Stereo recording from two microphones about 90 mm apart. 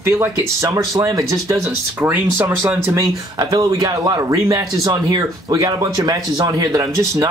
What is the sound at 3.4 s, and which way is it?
Speech, 40° right (ahead or behind).